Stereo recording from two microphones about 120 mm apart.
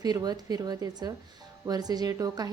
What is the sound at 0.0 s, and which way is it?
A woman's voice, 35° right (ahead or behind).